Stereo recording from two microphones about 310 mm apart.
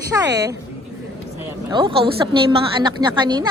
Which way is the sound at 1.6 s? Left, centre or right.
Centre.